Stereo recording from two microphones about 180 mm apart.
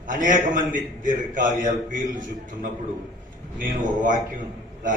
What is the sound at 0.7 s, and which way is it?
A man's voice, 50° right (ahead or behind).